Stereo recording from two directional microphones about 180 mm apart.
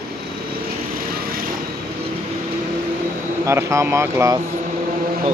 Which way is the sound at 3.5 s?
15° right (ahead or behind).